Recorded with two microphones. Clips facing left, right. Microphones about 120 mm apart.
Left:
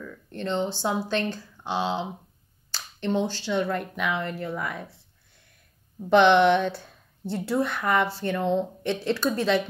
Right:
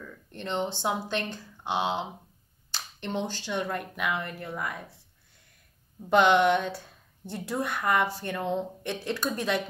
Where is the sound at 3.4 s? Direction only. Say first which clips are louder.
Left 5 dB; 15° right (ahead or behind).